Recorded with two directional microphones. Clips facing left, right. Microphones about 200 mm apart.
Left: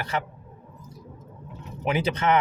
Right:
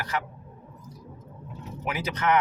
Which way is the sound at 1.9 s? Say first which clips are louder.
Left 3 dB; 30° left (ahead or behind).